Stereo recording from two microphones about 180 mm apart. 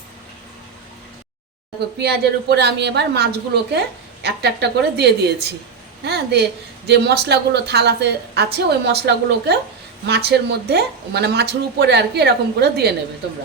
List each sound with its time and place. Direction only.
2.0 s a woman's voice: 65° right (ahead or behind)